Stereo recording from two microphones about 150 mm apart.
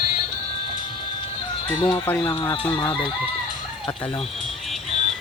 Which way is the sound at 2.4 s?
35° left (ahead or behind).